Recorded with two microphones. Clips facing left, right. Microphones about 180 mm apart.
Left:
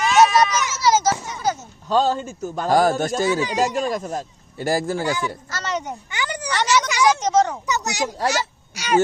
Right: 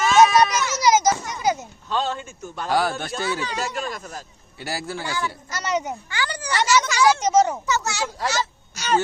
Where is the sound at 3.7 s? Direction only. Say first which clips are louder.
Left 7 dB; 40° left (ahead or behind).